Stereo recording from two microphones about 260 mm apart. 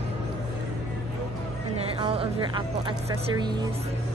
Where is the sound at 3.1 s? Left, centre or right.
Centre.